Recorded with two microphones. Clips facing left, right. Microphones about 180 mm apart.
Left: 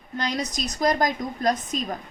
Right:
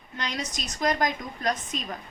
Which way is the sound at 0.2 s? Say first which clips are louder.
Left 6 dB; 35° left (ahead or behind).